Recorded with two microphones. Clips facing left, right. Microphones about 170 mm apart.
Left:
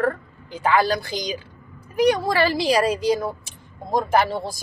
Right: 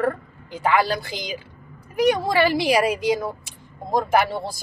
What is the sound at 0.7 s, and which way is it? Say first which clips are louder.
A woman's voice: left 2 dB; 20° right (ahead or behind).